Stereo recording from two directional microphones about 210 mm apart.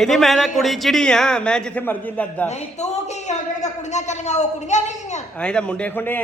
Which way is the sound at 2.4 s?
30° left (ahead or behind).